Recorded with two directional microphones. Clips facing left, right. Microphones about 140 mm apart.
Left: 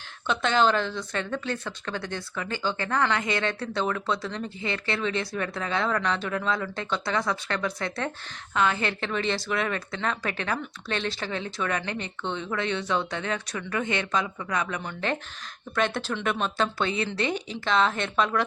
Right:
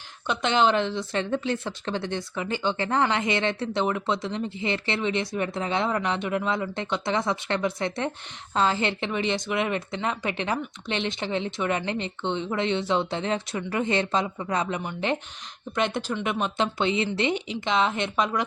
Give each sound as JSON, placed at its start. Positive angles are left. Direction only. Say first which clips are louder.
{"t": 0.3, "sound": "speech", "louder": "right 1 dB", "side_deg": -20}